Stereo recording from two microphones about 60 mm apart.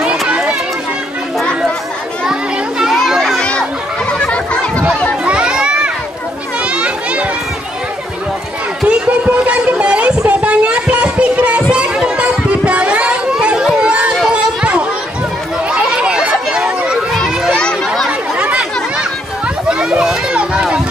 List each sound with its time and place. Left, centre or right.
0.3 s run: centre
2.8 s children playing: centre
3.3 s children playing: centre
4.1 s chatter: centre
5.2 s a sound: centre
6.6 s children playing: centre
8.8 s music: right
13.3 s children playing: centre
13.7 s run: centre
14.3 s a sound: centre
18.4 s a sound: centre